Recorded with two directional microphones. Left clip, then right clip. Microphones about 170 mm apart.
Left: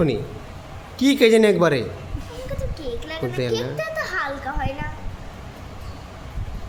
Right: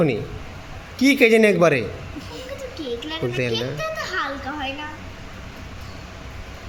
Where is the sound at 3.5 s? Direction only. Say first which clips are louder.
Even; 45° left (ahead or behind).